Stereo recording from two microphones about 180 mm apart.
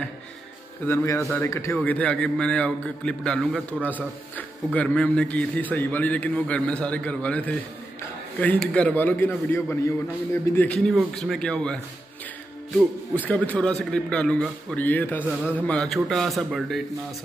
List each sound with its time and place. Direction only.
0.8 s a man's voice: 15° left (ahead or behind)
13.1 s a man's voice: 10° left (ahead or behind)